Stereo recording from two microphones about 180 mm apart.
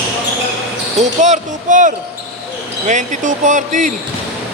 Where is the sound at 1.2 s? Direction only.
45° right (ahead or behind).